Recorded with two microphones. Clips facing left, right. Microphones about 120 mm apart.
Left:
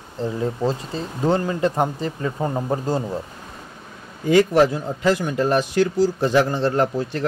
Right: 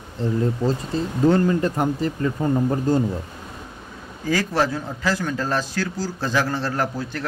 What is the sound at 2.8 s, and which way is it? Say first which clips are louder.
Speech: right 3 dB; 15° left (ahead or behind).